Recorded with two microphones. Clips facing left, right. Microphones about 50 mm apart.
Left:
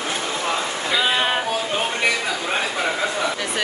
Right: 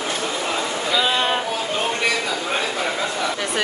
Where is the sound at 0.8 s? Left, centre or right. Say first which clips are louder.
Even; centre.